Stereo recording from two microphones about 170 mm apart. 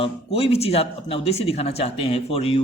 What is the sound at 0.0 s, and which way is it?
Speech, 35° left (ahead or behind).